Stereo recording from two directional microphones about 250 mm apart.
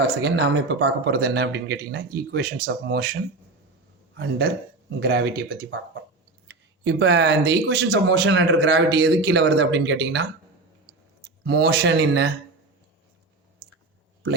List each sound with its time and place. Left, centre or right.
0.2 s speech: right
4.2 s speech: right
11.4 s speech: right